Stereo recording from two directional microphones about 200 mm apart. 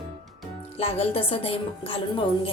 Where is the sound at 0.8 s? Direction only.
30° left (ahead or behind).